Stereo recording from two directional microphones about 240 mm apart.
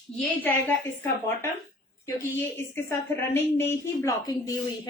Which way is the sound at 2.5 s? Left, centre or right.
Centre.